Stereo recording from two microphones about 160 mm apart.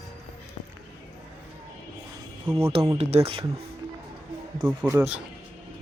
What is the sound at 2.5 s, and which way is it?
Speech, 15° right (ahead or behind).